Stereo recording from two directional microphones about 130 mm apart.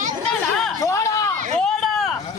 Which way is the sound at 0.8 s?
25° left (ahead or behind).